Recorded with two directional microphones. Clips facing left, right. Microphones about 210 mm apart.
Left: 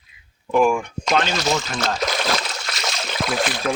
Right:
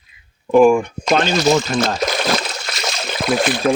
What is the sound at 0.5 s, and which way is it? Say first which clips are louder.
Speech: right 7 dB; 25° right (ahead or behind).